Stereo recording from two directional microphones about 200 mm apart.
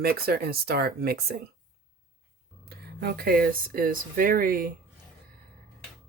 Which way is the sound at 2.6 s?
50° right (ahead or behind).